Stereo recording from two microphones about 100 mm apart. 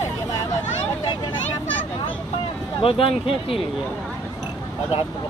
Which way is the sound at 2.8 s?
65° left (ahead or behind).